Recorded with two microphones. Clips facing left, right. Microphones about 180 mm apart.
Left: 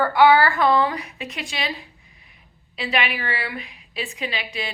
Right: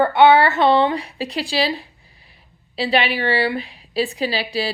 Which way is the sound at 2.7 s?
30° right (ahead or behind).